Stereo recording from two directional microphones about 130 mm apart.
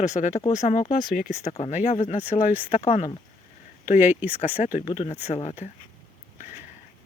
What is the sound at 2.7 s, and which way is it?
Speech, 55° left (ahead or behind).